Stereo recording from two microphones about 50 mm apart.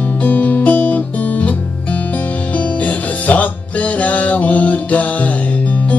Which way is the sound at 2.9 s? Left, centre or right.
Left.